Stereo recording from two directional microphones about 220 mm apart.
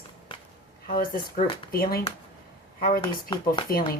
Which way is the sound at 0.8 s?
40° left (ahead or behind).